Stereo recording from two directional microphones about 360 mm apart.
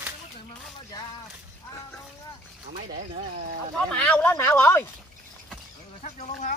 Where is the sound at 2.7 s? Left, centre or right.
Right.